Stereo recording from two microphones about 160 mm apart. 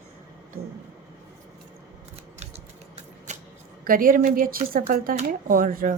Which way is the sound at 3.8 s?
60° right (ahead or behind).